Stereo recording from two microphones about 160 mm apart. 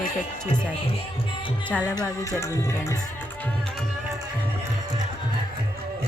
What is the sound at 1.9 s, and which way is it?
Music, 20° left (ahead or behind).